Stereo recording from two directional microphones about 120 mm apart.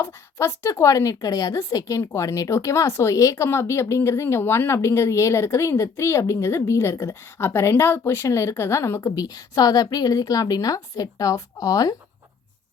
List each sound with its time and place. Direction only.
0.0 s speech: 20° left (ahead or behind)